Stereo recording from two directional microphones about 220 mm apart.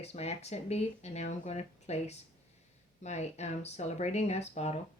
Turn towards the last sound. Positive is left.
turn(degrees=30)  # may be behind; listen again after turning